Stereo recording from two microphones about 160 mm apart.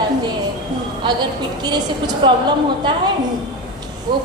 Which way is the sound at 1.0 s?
25° right (ahead or behind).